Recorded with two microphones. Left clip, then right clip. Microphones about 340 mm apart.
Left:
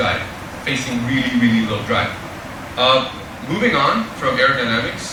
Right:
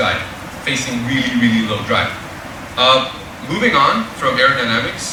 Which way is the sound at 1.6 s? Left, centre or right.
Centre.